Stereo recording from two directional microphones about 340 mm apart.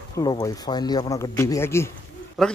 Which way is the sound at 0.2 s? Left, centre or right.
Centre.